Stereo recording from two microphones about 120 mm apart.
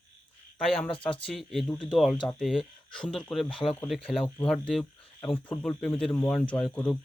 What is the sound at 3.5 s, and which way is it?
Speech, 50° left (ahead or behind).